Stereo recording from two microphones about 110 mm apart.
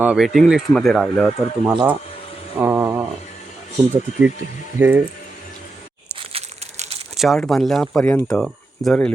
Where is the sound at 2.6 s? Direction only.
15° right (ahead or behind).